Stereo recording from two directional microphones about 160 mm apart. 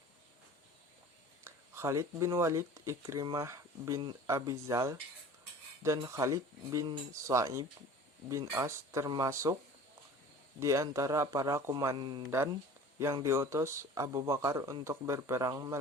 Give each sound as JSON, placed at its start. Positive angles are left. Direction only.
{"t": 1.5, "sound": "speech", "side_deg": -15}
{"t": 10.6, "sound": "speech", "side_deg": -20}
{"t": 13.2, "sound": "speech", "side_deg": -20}